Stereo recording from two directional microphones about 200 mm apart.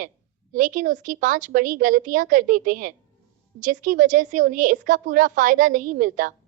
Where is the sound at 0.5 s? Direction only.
40° right (ahead or behind).